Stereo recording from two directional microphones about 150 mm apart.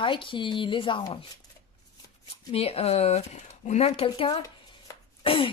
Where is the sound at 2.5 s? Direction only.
40° left (ahead or behind).